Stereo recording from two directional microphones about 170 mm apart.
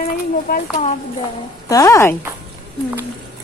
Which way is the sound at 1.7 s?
20° left (ahead or behind).